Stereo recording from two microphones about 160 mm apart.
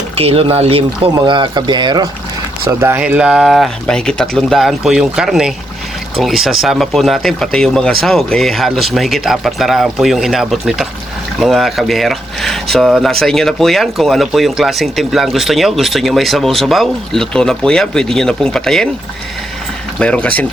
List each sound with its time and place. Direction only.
0.2 s speech: 35° right (ahead or behind)
2.6 s speech: 15° right (ahead or behind); by 18.9 s 5° left (ahead or behind)
20.0 s speech: 5° left (ahead or behind)